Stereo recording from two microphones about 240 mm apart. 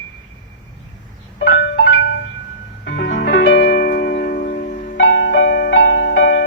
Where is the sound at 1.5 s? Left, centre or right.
Left.